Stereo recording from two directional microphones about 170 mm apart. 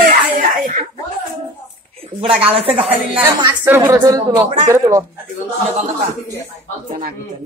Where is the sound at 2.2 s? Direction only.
35° right (ahead or behind).